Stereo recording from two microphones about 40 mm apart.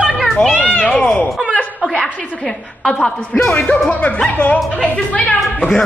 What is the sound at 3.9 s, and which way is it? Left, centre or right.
Speech, left.